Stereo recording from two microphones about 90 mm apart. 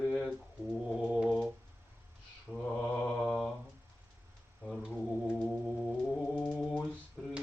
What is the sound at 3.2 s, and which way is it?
Mantra, 5° left (ahead or behind).